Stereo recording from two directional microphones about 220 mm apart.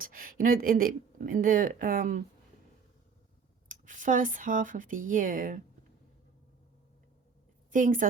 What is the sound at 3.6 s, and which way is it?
A woman's voice, 35° right (ahead or behind).